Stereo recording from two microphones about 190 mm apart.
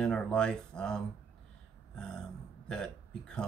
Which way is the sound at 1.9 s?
5° left (ahead or behind).